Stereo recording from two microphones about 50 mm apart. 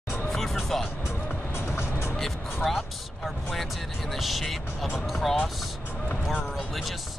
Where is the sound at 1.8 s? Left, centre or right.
Left.